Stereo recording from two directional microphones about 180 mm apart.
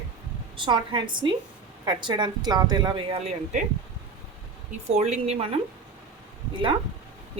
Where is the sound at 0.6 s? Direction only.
25° right (ahead or behind).